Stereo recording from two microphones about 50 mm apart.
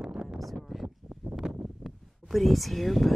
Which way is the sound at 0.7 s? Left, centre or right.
Centre.